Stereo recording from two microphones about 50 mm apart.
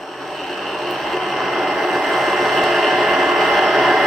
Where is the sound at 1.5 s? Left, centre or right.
Centre.